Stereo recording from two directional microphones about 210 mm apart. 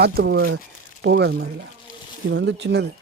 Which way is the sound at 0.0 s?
50° right (ahead or behind).